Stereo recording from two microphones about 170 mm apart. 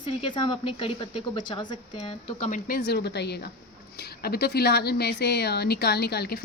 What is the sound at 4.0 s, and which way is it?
A woman's voice, 65° left (ahead or behind).